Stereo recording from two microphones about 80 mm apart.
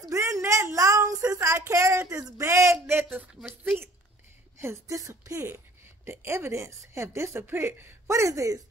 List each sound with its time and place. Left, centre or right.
0.0 s a sound: right
1.6 s a woman's voice: right
3.3 s a woman's voice: centre
4.6 s a woman's voice: right